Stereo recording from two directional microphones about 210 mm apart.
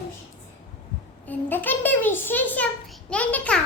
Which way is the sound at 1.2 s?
10° left (ahead or behind).